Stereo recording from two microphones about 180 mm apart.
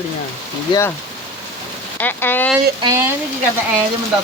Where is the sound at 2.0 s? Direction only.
10° left (ahead or behind).